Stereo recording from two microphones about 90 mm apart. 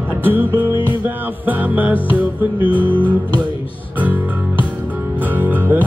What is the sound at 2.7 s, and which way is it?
Music, 20° left (ahead or behind).